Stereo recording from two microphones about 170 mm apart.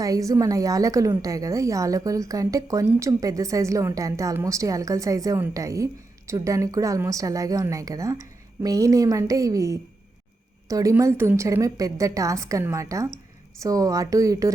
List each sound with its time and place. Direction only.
0.0 s a woman's voice: 20° right (ahead or behind)